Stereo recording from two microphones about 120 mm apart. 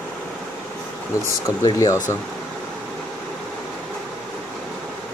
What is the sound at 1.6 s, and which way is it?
Speech, 30° left (ahead or behind).